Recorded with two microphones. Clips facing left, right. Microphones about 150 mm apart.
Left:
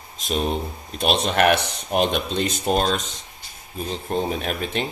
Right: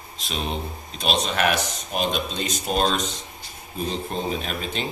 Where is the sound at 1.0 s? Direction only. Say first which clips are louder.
Left 4 dB; 55° left (ahead or behind).